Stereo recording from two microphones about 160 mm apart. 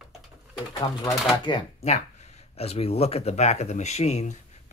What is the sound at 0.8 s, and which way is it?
Speech, 25° left (ahead or behind).